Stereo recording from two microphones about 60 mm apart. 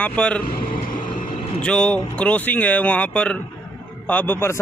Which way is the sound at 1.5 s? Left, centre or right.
Centre.